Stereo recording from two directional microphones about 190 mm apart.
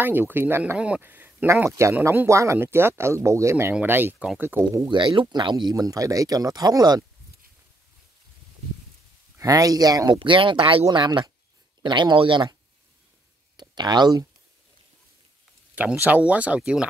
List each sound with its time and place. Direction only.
0.0 s speech: 10° right (ahead or behind)
9.4 s speech: 20° right (ahead or behind)
13.6 s speech: 20° right (ahead or behind)
15.7 s speech: 10° right (ahead or behind)